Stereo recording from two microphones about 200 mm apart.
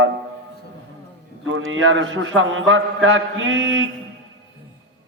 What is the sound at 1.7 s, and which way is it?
A man's voice, 75° right (ahead or behind).